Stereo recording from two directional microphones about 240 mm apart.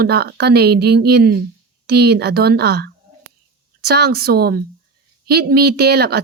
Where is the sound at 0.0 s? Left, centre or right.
Right.